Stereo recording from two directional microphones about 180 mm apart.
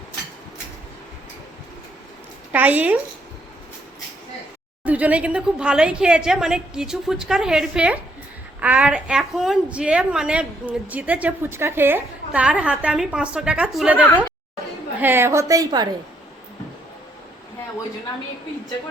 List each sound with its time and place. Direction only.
2.5 s a woman's voice: 10° right (ahead or behind)
4.8 s a woman's voice: 10° right (ahead or behind)
15.0 s a woman's voice: 10° right (ahead or behind)